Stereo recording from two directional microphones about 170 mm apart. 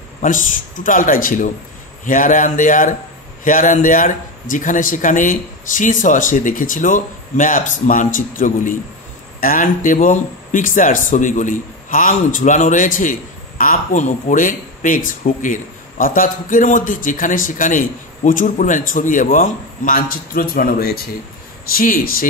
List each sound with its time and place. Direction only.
0.2 s speech: 50° left (ahead or behind)